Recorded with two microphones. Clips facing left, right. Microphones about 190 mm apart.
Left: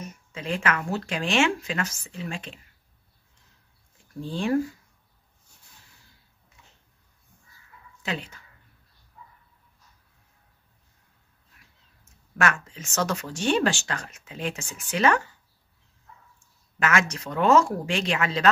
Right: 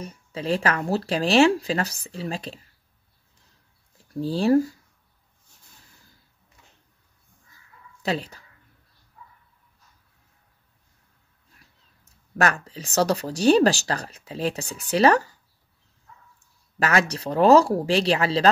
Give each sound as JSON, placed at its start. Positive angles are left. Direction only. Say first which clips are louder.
{"t": 0.0, "sound": "speech", "louder": "right 5 dB", "side_deg": -35}
{"t": 4.1, "sound": "speech", "louder": "right 6 dB", "side_deg": -35}
{"t": 8.0, "sound": "speech", "louder": "right 6 dB", "side_deg": -35}
{"t": 12.4, "sound": "speech", "louder": "right 3 dB", "side_deg": -35}
{"t": 16.8, "sound": "speech", "louder": "right 3 dB", "side_deg": -35}